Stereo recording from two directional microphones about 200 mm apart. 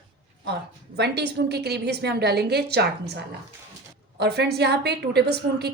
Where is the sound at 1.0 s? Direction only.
55° right (ahead or behind).